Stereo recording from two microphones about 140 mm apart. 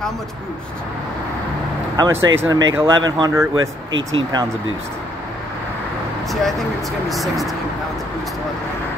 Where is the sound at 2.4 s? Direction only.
15° right (ahead or behind).